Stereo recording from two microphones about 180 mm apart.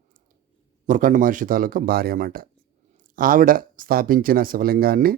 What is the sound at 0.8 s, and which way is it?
Speech, 45° right (ahead or behind).